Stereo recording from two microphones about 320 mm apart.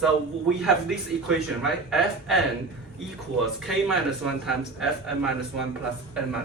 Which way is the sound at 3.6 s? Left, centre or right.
Centre.